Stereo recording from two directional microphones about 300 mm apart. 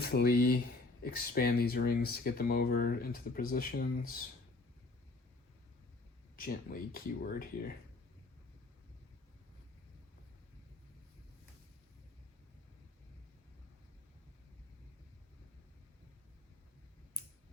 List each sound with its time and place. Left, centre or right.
0.0 s speech: left
6.3 s speech: left